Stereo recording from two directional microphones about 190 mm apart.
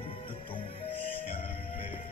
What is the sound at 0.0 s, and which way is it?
Music, 30° left (ahead or behind).